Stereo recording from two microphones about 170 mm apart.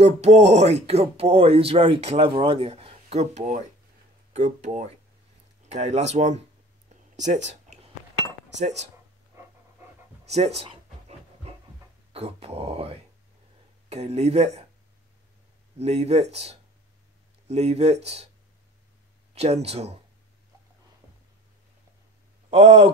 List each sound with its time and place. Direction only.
0.0 s speech: 40° right (ahead or behind)
7.2 s a sound: 45° right (ahead or behind)
8.5 s speech: 40° right (ahead or behind)
9.3 s pant: 15° right (ahead or behind)
10.2 s pant: 40° right (ahead or behind)
12.1 s speech: 35° right (ahead or behind)
15.8 s speech: 40° right (ahead or behind)
19.3 s speech: 40° right (ahead or behind)
22.5 s speech: 35° right (ahead or behind)